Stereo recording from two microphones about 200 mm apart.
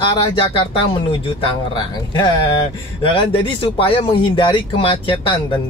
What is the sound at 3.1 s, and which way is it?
Speech, 25° left (ahead or behind).